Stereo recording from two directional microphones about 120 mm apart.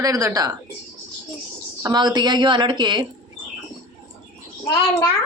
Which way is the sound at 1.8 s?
35° right (ahead or behind).